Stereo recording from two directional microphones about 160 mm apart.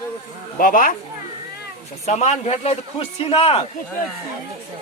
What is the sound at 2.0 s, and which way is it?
Speech, 45° left (ahead or behind).